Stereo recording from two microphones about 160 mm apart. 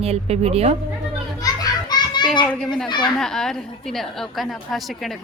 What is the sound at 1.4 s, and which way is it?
Children playing, 25° left (ahead or behind).